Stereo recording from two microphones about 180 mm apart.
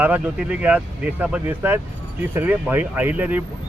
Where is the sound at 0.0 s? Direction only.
5° right (ahead or behind).